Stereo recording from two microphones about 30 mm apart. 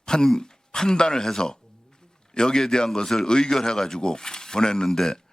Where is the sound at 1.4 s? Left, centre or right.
Left.